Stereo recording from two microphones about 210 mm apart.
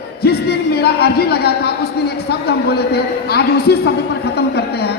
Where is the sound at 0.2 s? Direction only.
50° left (ahead or behind).